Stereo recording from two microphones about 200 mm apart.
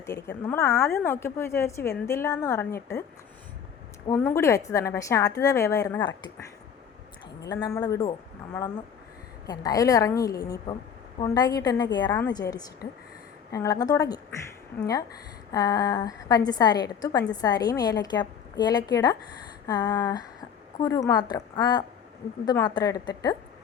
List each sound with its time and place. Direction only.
0.3 s a woman's voice: 10° left (ahead or behind)
4.0 s a woman's voice: 15° left (ahead or behind)
7.4 s a woman's voice: 20° left (ahead or behind)
9.5 s a woman's voice: 20° left (ahead or behind)
15.5 s a woman's voice: 20° left (ahead or behind)